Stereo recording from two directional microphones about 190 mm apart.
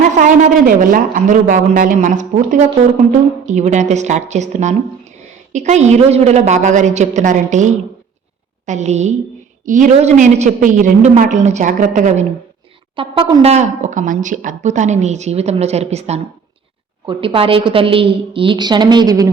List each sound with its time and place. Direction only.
0.0 s speech: 40° right (ahead or behind)
13.0 s a woman's voice: 25° right (ahead or behind)